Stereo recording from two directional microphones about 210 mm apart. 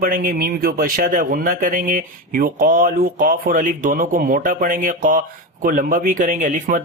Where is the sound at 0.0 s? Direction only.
45° right (ahead or behind).